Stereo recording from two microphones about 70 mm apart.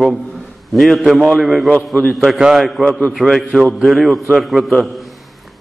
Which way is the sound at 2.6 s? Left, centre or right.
Centre.